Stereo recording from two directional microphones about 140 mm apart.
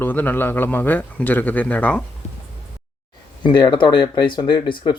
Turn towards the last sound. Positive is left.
turn(degrees=35)  # may be behind; listen again after turning